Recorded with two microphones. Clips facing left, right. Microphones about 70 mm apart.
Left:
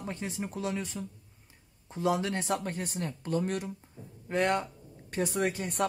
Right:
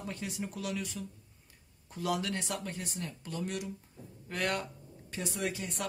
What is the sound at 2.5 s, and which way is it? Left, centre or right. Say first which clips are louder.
Speech: left 6 dB; left.